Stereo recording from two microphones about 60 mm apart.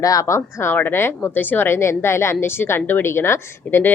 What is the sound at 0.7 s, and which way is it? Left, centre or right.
A woman's voice, left.